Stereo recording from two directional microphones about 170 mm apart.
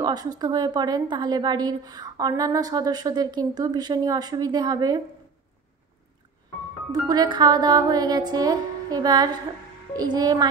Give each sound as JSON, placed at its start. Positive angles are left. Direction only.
{"t": 0.0, "sound": "a woman's voice", "side_deg": -25}
{"t": 6.9, "sound": "a woman's voice", "side_deg": -25}